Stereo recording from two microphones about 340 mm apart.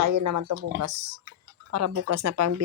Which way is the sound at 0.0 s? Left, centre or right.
Right.